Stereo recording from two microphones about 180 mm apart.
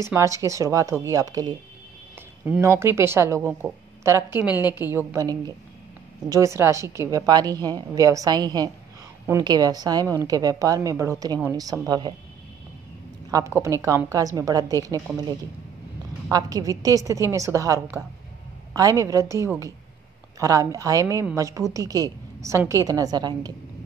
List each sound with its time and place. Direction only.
0.0 s speech: 15° right (ahead or behind)
2.4 s a woman's voice: 10° right (ahead or behind)
13.3 s a woman's voice: 15° right (ahead or behind)
16.3 s a woman's voice: 20° right (ahead or behind)